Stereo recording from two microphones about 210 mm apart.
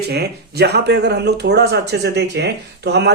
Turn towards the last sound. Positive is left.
turn(degrees=-55)  # may be behind; listen again after turning